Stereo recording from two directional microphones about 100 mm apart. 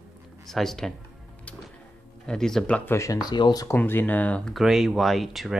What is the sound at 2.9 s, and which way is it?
Speech, 35° left (ahead or behind).